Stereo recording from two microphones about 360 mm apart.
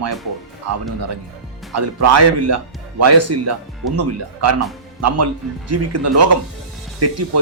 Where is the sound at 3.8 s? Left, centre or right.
Right.